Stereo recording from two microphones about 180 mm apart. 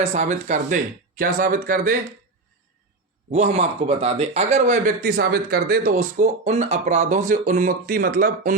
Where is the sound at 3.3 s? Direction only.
40° right (ahead or behind).